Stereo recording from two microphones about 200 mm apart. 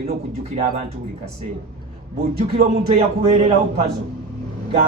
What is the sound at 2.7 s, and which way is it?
A man's voice, 30° right (ahead or behind).